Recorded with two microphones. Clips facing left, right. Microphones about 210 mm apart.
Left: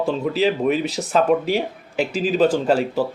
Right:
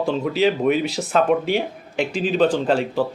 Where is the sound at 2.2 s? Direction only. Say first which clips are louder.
Left 1 dB; 5° left (ahead or behind).